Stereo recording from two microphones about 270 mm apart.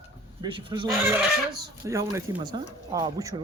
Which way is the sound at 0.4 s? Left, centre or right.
Centre.